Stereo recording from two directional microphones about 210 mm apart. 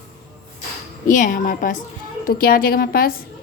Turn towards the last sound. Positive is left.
turn(degrees=45)  # may be behind; listen again after turning